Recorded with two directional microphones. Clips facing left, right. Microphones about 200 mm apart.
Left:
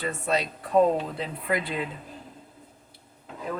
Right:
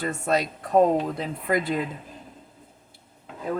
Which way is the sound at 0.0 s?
45° right (ahead or behind).